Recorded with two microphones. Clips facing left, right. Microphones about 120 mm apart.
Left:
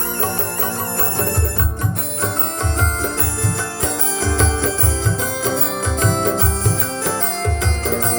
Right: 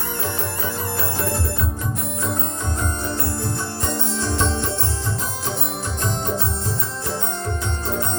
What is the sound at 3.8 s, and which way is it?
Music, 90° left.